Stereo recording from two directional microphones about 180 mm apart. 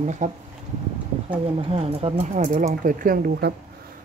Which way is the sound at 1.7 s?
35° right (ahead or behind).